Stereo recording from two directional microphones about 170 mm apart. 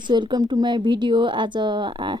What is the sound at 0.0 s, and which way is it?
A woman's voice, 25° right (ahead or behind).